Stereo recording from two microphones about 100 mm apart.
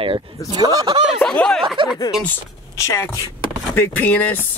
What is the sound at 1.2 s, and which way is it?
Speech, 10° left (ahead or behind).